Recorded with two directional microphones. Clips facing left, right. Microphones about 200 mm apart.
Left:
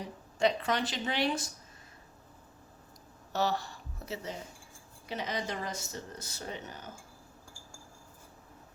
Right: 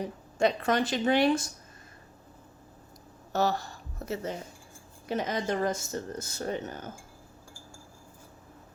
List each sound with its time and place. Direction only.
0.3 s speech: 50° right (ahead or behind)
3.3 s a woman's voice: 45° right (ahead or behind)